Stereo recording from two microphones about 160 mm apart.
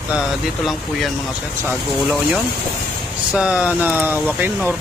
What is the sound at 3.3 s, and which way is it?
Speech, 5° right (ahead or behind).